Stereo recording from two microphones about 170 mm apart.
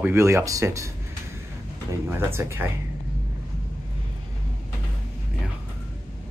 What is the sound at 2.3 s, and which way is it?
Speech, 15° right (ahead or behind).